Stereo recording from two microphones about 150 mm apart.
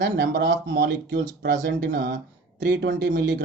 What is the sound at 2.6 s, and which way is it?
Speech, 90° right.